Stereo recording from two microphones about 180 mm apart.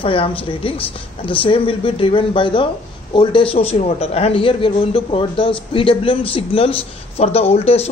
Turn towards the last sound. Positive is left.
turn(degrees=35)  # may be behind; listen again after turning